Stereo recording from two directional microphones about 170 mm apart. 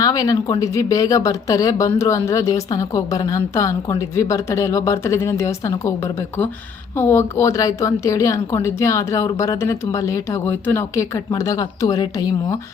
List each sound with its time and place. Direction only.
0.0 s a woman's voice: 20° left (ahead or behind)
6.9 s a woman's voice: 15° left (ahead or behind)